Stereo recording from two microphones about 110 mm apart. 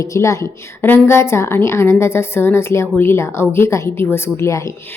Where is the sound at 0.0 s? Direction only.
25° left (ahead or behind).